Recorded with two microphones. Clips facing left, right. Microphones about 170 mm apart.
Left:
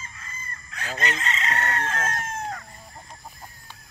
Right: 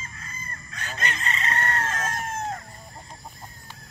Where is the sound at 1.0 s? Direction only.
90° left; by 2.0 s 70° left (ahead or behind).